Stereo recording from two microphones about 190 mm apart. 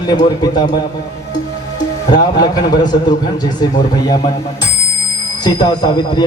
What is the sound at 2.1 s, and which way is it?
A man's voice, 20° left (ahead or behind).